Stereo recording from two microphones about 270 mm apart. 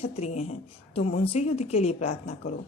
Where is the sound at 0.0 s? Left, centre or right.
Left.